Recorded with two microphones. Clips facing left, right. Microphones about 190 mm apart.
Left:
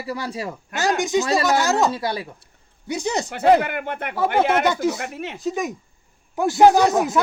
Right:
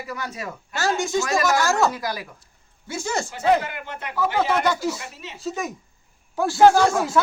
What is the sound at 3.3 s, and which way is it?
Speech, 60° left (ahead or behind).